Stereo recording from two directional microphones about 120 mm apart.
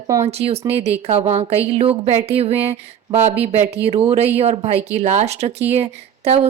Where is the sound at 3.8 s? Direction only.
55° right (ahead or behind).